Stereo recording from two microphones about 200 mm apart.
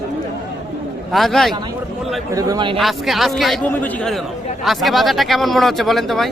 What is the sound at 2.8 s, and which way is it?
A man's voice, centre (ahead or behind).